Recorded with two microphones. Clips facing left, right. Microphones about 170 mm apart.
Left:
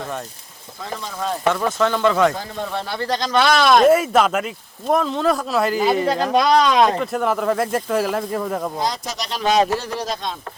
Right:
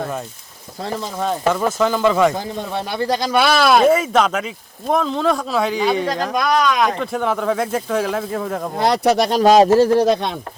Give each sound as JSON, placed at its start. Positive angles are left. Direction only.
{"t": 1.5, "sound": "speech", "side_deg": -5}
{"t": 2.3, "sound": "speech", "side_deg": -15}
{"t": 3.9, "sound": "speech", "side_deg": 5}
{"t": 6.3, "sound": "speech", "side_deg": 30}
{"t": 7.0, "sound": "speech", "side_deg": 0}
{"t": 8.8, "sound": "speech", "side_deg": -65}
{"t": 10.0, "sound": "speech", "side_deg": -60}